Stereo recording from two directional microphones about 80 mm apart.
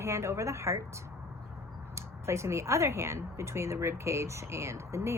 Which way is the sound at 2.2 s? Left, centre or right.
Right.